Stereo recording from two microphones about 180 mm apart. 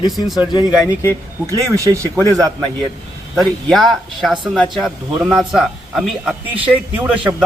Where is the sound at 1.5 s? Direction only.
20° right (ahead or behind).